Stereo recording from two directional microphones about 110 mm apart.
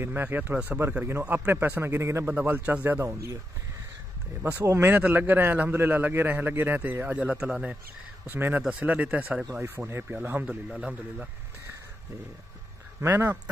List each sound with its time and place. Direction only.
0.0 s a man's voice: 20° right (ahead or behind)
4.4 s a man's voice: 15° right (ahead or behind)
13.0 s a man's voice: 20° right (ahead or behind)